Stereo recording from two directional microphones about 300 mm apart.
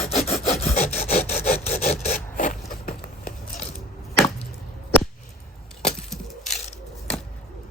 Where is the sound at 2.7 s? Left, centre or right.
Left.